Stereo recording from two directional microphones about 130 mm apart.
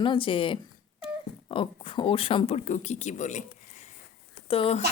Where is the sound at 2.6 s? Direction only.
75° left (ahead or behind).